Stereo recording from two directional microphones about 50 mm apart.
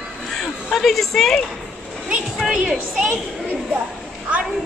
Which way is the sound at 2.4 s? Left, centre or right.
Centre.